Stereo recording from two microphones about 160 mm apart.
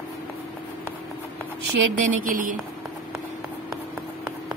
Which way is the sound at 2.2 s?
55° right (ahead or behind).